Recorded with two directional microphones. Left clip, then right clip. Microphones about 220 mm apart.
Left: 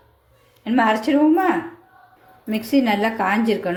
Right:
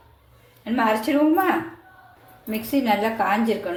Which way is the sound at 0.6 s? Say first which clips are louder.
Left 3 dB; 35° left (ahead or behind).